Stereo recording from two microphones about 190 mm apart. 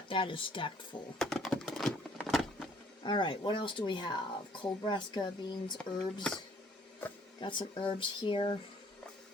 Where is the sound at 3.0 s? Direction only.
25° left (ahead or behind).